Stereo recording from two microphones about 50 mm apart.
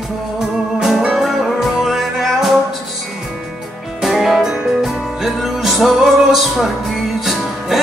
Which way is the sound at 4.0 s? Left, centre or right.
Centre.